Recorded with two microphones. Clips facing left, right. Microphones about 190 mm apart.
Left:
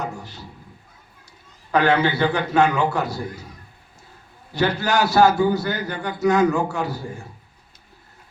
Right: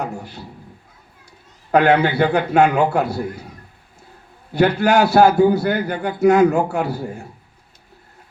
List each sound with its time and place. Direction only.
0.0 s a sound: 60° right (ahead or behind)
1.7 s a man's voice: 55° right (ahead or behind)
4.5 s a man's voice: 55° right (ahead or behind)